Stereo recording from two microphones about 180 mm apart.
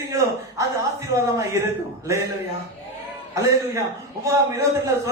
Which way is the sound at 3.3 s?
15° right (ahead or behind).